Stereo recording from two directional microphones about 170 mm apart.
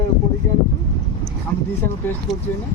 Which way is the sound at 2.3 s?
Centre (ahead or behind).